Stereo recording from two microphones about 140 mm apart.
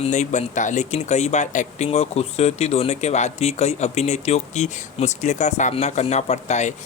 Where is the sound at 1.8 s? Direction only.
50° left (ahead or behind).